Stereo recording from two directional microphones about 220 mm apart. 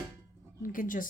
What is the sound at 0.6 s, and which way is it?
Speech, 40° left (ahead or behind).